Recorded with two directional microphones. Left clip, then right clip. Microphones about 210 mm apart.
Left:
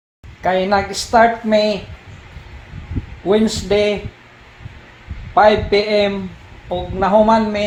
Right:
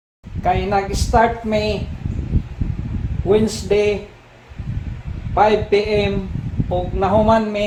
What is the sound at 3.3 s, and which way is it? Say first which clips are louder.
Speech: left 1 dB; 15° left (ahead or behind).